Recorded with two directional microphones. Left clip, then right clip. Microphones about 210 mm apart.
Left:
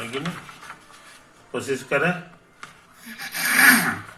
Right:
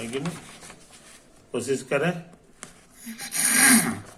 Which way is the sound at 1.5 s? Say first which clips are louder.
Left 2 dB; 15° right (ahead or behind).